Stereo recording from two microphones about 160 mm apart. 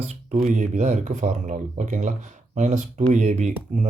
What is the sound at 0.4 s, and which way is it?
A man's voice, 50° right (ahead or behind).